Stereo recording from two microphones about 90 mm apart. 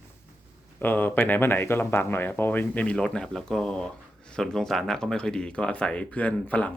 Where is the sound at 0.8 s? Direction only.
20° left (ahead or behind).